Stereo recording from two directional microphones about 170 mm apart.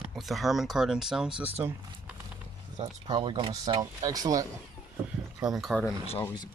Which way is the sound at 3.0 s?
25° right (ahead or behind).